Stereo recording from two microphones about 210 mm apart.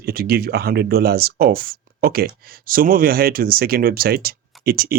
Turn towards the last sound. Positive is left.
turn(degrees=-45)  # may be behind; listen again after turning